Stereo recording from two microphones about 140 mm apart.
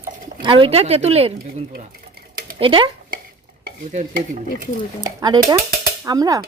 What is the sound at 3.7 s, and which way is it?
Stir, 60° right (ahead or behind).